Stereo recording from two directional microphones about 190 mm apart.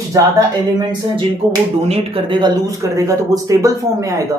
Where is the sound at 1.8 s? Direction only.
30° right (ahead or behind).